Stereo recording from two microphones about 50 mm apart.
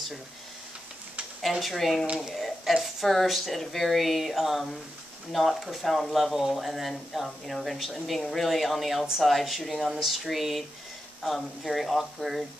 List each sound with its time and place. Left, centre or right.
1.4 s speech: centre